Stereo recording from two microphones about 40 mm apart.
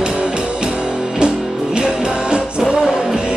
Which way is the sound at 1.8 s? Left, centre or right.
Right.